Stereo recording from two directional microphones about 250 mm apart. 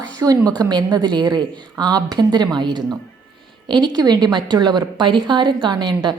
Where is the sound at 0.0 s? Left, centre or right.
Centre.